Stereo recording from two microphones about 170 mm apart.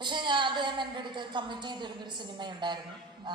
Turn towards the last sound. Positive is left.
turn(degrees=-25)  # may be behind; listen again after turning